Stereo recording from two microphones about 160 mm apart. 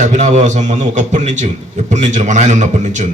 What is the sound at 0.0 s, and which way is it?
A man's voice, 50° right (ahead or behind).